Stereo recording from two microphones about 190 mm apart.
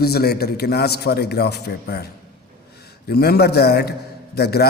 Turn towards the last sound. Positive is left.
turn(degrees=60)  # may be behind; listen again after turning